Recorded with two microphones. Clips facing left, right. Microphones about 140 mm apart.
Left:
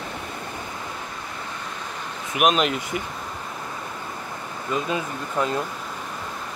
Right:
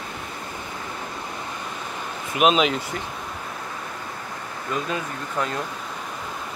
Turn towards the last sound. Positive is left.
turn(degrees=5)  # may be behind; listen again after turning